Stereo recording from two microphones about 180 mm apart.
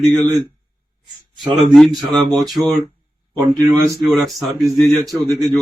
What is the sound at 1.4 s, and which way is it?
Speech, centre (ahead or behind).